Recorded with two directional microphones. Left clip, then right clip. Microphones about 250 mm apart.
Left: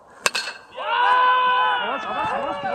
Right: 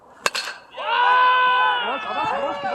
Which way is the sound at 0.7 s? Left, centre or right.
Right.